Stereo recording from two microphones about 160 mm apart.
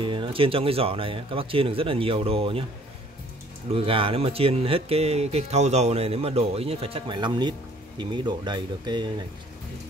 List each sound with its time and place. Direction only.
0.0 s speech: 30° right (ahead or behind)
3.7 s speech: 35° right (ahead or behind)